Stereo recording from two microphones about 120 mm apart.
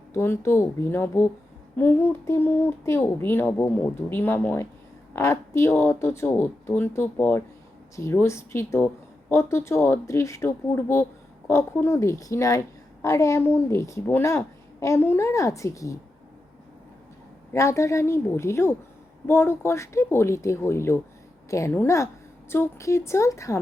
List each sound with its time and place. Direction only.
0.1 s a woman's voice: 20° left (ahead or behind)
17.5 s a woman's voice: 25° left (ahead or behind)